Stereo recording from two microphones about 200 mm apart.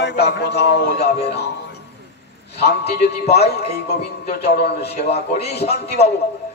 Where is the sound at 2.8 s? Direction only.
30° left (ahead or behind).